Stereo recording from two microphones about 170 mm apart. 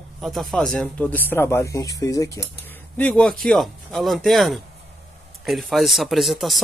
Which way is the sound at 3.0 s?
5° left (ahead or behind).